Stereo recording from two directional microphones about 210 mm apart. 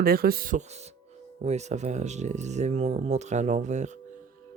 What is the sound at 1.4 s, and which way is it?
Speech, 30° right (ahead or behind).